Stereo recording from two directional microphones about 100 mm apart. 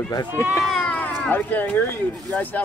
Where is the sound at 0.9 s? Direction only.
15° left (ahead or behind).